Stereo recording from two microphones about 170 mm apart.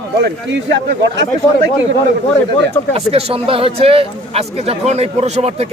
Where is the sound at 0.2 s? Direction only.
90° right.